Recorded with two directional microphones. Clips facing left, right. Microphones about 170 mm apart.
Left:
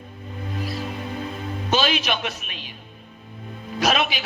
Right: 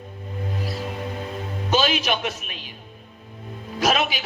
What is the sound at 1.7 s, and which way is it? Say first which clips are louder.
A man's voice: right 1 dB; 45° right (ahead or behind).